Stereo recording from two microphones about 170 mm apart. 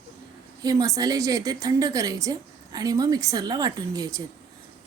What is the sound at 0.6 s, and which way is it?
A woman's voice, 20° right (ahead or behind).